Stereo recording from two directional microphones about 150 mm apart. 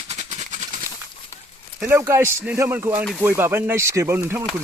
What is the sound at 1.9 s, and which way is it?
Speech, 15° right (ahead or behind).